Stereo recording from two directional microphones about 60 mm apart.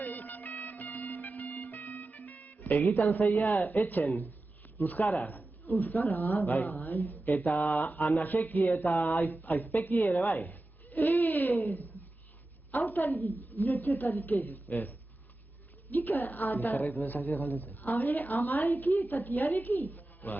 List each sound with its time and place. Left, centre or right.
0.0 s music: left
2.7 s a woman's voice: left
12.7 s a sound: left
13.2 s a woman's voice: left